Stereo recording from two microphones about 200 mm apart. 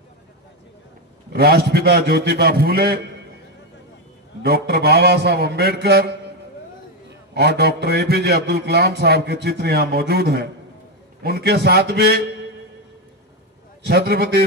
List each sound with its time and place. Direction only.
1.3 s a man's voice: 50° right (ahead or behind)
4.4 s a man's voice: 50° right (ahead or behind)
13.8 s a man's voice: 50° right (ahead or behind)